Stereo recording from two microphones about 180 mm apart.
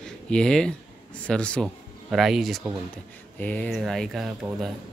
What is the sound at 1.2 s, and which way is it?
Speech, 5° left (ahead or behind).